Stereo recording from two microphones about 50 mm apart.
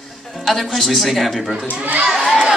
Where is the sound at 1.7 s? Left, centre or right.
Right.